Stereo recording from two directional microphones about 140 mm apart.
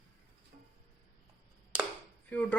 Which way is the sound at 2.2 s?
10° left (ahead or behind).